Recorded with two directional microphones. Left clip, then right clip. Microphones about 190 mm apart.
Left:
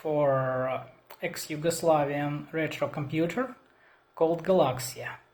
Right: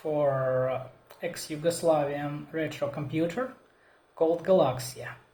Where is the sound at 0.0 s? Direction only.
45° left (ahead or behind).